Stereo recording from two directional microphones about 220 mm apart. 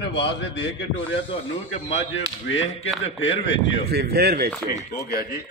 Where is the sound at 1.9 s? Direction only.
60° left (ahead or behind).